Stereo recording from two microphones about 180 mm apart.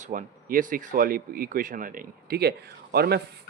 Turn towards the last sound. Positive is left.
turn(degrees=-60)  # may be behind; listen again after turning